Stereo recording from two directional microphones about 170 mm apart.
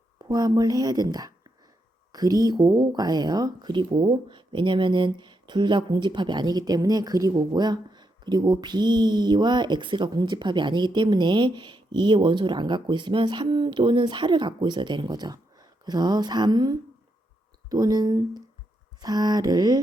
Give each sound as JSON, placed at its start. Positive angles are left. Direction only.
{"t": 0.2, "sound": "a woman's voice", "side_deg": -20}